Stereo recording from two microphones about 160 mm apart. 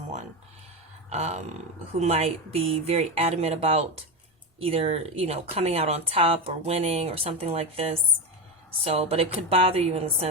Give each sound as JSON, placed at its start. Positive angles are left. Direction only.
{"t": 1.1, "sound": "speech", "side_deg": -45}